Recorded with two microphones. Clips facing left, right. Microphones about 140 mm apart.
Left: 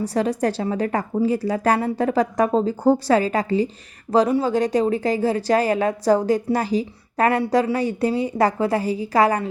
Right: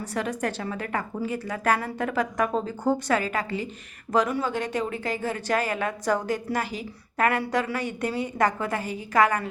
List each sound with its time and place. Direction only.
0.0 s a woman's voice: 35° left (ahead or behind)